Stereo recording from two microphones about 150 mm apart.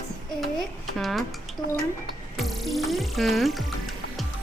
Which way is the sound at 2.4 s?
Centre (ahead or behind).